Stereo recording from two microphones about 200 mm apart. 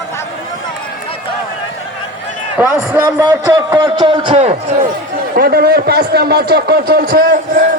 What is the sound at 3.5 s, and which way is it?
A man's voice, 20° right (ahead or behind).